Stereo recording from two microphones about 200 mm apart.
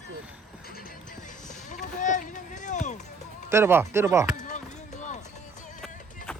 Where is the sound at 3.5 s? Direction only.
10° right (ahead or behind).